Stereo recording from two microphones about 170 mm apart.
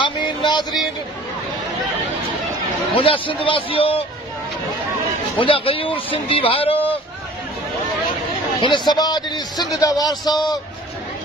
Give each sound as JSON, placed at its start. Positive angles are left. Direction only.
{"t": 0.0, "sound": "a sound", "side_deg": 25}
{"t": 2.9, "sound": "speech", "side_deg": 30}
{"t": 5.4, "sound": "speech", "side_deg": 30}
{"t": 8.5, "sound": "a man's voice", "side_deg": 25}